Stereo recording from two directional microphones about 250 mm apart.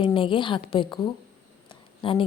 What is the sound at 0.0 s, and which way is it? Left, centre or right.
A woman's voice, left.